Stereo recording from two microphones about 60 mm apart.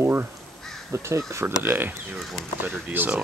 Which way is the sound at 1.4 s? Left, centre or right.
Right.